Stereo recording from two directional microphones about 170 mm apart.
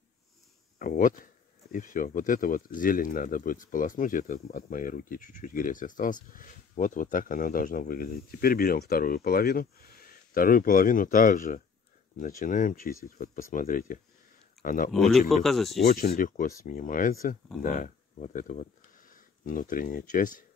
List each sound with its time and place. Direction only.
0.7 s speech: 55° left (ahead or behind)
14.9 s speech: centre (ahead or behind)
15.8 s speech: 70° left (ahead or behind); by 20.4 s 50° left (ahead or behind)